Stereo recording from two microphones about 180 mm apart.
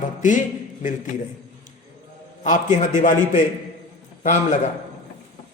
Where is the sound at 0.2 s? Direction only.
45° left (ahead or behind).